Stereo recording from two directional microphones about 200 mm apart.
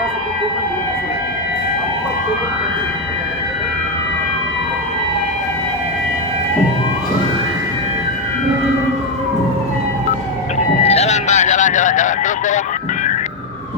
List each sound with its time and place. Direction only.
10.8 s vehicle: 30° left (ahead or behind)